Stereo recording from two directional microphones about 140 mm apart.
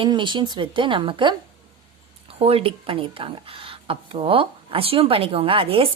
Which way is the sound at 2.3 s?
45° right (ahead or behind).